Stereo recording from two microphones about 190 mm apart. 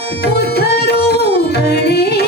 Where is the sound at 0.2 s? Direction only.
55° left (ahead or behind).